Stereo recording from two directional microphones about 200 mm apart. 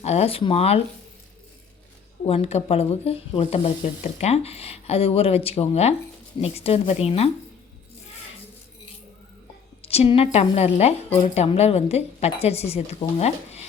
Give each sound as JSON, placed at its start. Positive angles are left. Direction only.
{"t": 0.0, "sound": "a woman's voice", "side_deg": 30}
{"t": 2.2, "sound": "a woman's voice", "side_deg": 30}
{"t": 9.8, "sound": "a woman's voice", "side_deg": 30}